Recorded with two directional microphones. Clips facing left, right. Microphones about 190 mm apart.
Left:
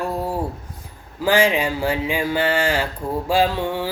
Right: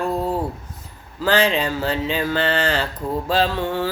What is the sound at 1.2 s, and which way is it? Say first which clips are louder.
Speech: left 1 dB; 10° left (ahead or behind).